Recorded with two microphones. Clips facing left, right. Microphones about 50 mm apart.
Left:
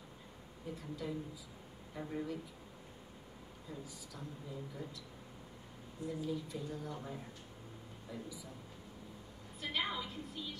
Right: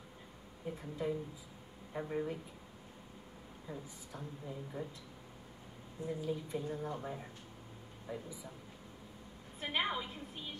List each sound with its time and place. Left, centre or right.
0.7 s speech: right
3.6 s speech: right
6.0 s speech: right
8.1 s speech: right
9.6 s speech: right